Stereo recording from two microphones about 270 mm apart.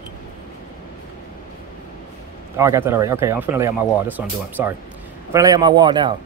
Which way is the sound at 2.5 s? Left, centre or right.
Centre.